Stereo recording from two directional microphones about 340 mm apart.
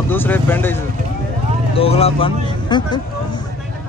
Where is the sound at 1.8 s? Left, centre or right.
Centre.